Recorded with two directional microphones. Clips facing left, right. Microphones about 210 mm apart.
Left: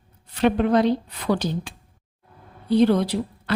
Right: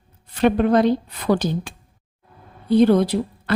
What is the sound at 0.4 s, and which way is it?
Speech, 50° right (ahead or behind).